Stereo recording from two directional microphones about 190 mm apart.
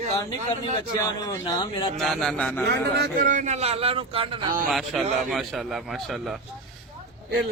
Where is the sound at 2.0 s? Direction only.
Centre (ahead or behind).